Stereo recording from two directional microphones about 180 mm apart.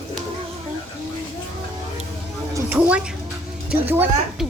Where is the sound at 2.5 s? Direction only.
10° right (ahead or behind).